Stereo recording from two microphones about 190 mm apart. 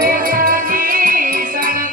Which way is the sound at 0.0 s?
50° right (ahead or behind).